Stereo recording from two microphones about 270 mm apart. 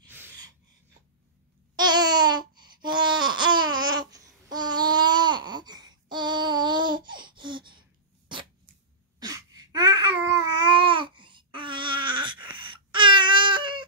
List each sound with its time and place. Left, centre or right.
0.1 s a sound: centre
1.8 s babbling: centre
9.2 s babbling: centre